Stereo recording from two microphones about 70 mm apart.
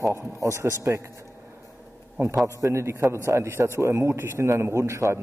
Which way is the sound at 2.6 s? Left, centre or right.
Right.